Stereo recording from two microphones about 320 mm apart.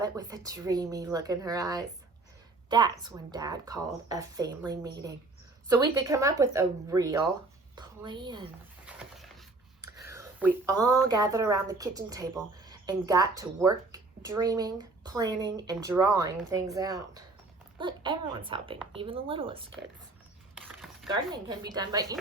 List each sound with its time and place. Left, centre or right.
0.0 s a woman's voice: centre
8.9 s a sound: centre
9.8 s a woman's voice: centre
21.2 s speech: centre